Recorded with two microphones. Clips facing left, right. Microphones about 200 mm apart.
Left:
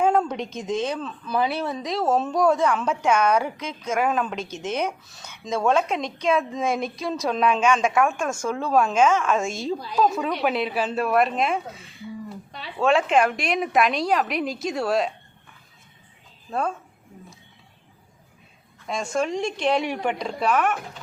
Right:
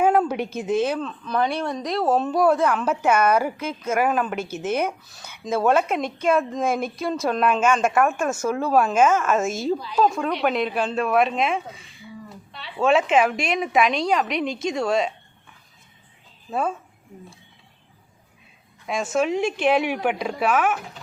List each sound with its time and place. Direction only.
0.0 s speech: 5° right (ahead or behind)
12.5 s a sound: 40° left (ahead or behind)
12.8 s speech: centre (ahead or behind)
16.5 s speech: 5° right (ahead or behind)
18.9 s speech: 5° right (ahead or behind)